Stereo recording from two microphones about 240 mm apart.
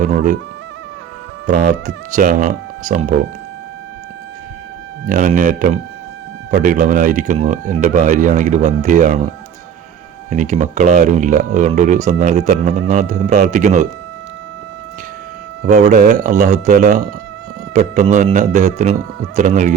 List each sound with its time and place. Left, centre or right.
0.0 s speech: right
1.5 s speech: right
5.0 s speech: right
10.2 s a man's voice: right
15.6 s a man's voice: right